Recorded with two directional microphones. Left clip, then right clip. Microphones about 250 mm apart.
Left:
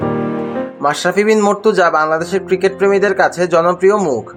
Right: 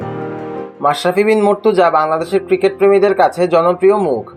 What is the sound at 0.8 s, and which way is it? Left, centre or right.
Speech, centre.